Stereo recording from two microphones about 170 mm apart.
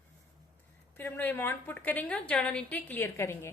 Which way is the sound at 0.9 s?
10° left (ahead or behind).